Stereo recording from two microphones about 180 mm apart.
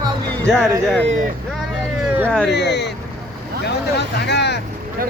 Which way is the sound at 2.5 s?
70° left (ahead or behind).